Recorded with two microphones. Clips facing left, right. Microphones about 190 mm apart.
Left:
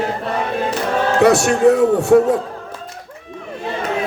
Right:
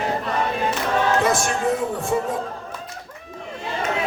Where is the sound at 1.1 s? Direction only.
70° left (ahead or behind).